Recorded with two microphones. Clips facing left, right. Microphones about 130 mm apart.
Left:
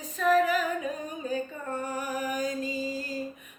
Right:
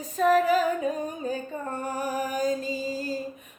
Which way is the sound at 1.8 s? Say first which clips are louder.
Right 3 dB; 35° right (ahead or behind).